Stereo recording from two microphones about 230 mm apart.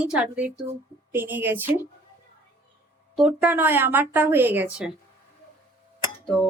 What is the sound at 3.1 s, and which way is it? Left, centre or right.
Speech, centre.